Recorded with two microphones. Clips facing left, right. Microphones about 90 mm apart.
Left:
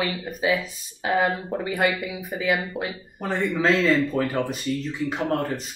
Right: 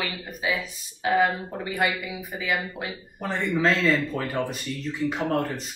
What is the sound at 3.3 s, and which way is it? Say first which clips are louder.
Speech: left 2 dB; 5° left (ahead or behind).